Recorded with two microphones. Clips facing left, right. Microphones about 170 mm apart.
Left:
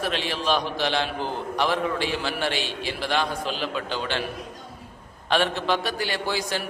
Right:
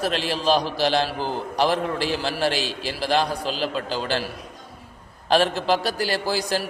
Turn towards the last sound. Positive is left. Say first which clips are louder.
# right 3 dB
turn(degrees=-35)  # may be behind; listen again after turning